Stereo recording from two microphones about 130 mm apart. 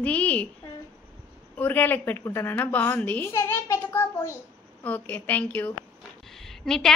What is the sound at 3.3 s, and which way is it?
A child's voice, 25° left (ahead or behind).